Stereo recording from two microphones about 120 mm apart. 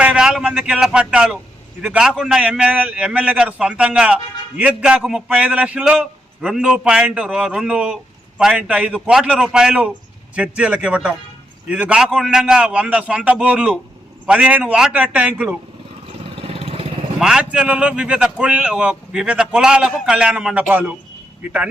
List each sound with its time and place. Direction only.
0.0 s a man's voice: 10° right (ahead or behind)
16.3 s vehicle: 55° right (ahead or behind)
17.2 s a man's voice: 5° right (ahead or behind)